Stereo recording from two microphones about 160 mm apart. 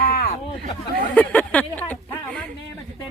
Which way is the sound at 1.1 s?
10° left (ahead or behind).